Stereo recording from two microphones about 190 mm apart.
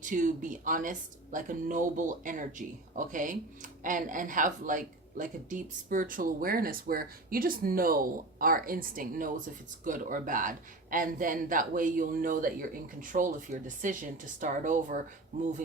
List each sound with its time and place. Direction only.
0.0 s speech: 40° right (ahead or behind)